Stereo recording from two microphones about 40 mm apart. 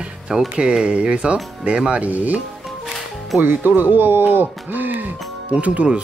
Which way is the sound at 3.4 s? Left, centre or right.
Right.